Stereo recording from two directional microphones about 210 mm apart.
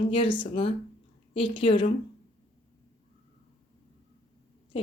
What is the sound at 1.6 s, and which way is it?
Speech, 25° left (ahead or behind).